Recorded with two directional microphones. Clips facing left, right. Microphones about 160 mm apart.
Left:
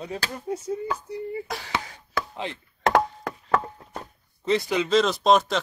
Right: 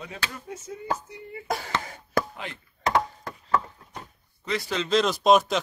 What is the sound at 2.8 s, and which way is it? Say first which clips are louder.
Chop: left 4 dB; 70° left (ahead or behind).